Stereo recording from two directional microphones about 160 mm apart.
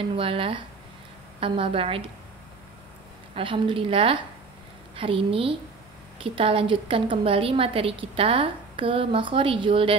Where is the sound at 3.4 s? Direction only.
35° right (ahead or behind).